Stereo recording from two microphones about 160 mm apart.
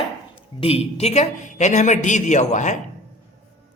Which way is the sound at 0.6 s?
40° left (ahead or behind).